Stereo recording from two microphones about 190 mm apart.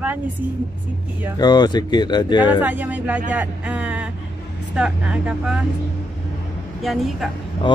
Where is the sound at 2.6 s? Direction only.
10° right (ahead or behind).